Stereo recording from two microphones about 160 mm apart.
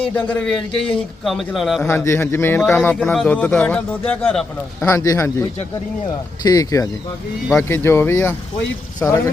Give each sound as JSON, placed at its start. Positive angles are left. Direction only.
{"t": 0.1, "sound": "a man's voice", "side_deg": 5}
{"t": 1.9, "sound": "a man's voice", "side_deg": 15}
{"t": 4.8, "sound": "a man's voice", "side_deg": 20}
{"t": 6.4, "sound": "a man's voice", "side_deg": 20}